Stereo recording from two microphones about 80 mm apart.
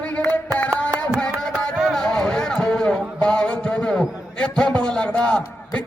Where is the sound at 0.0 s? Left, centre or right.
Centre.